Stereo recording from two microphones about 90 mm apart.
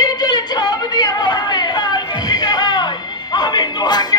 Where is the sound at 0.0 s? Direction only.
50° left (ahead or behind).